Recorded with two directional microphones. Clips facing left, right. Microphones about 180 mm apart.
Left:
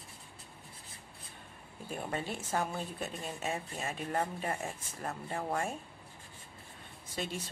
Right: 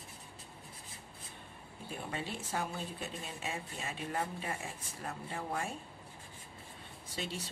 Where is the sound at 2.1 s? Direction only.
45° left (ahead or behind).